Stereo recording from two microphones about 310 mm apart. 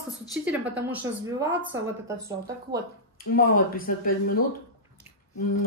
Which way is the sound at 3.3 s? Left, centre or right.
Left.